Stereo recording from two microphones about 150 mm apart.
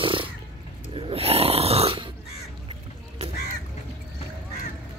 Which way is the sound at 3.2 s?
45° right (ahead or behind).